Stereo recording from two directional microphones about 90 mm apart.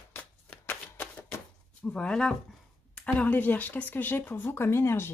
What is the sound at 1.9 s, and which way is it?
Speech, 10° left (ahead or behind).